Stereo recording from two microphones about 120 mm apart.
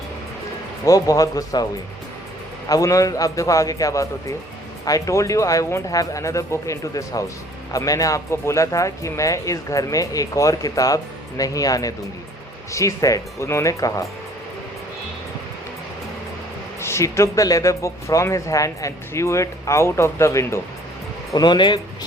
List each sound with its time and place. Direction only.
0.9 s speech: 30° left (ahead or behind)
2.6 s speech: 30° left (ahead or behind)
16.8 s speech: 25° left (ahead or behind)
21.3 s speech: 35° left (ahead or behind)